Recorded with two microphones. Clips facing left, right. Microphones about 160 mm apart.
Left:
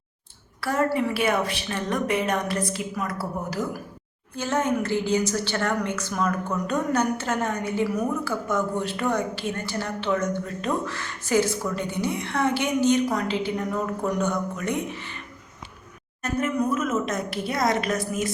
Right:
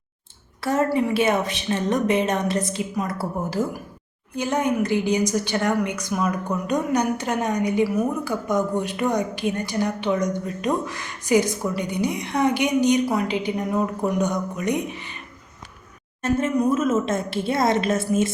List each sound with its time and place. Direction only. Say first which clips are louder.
0.6 s a woman's voice: right 3 dB; 20° right (ahead or behind)
4.4 s a woman's voice: right 2 dB; 15° right (ahead or behind)
16.2 s a woman's voice: right 4 dB; 25° right (ahead or behind)